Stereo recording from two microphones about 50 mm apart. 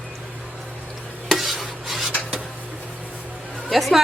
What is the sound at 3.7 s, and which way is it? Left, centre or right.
Speech, centre.